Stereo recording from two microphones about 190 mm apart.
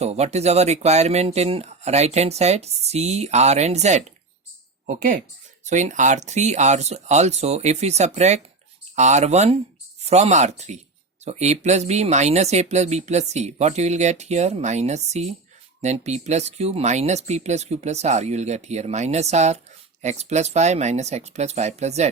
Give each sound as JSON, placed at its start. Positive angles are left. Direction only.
{"t": 0.0, "sound": "speech", "side_deg": -35}